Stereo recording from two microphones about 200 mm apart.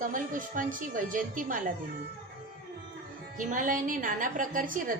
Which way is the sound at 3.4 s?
40° right (ahead or behind).